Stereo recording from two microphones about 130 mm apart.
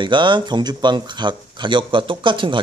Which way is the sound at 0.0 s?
35° right (ahead or behind).